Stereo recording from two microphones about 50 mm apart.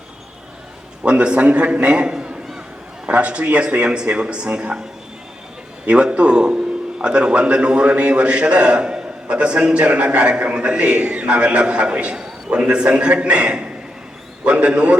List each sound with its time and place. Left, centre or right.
1.0 s a man's voice: right
2.0 s a man's voice: centre
5.8 s a man's voice: right